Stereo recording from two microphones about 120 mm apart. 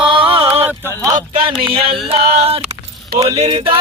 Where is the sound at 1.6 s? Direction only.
50° right (ahead or behind).